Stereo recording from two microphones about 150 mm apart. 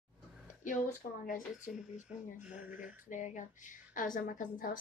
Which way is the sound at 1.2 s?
60° left (ahead or behind).